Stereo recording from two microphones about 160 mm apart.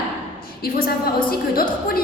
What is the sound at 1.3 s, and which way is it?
Speech, 65° left (ahead or behind).